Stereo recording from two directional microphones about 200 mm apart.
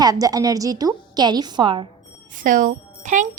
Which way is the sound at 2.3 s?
40° right (ahead or behind).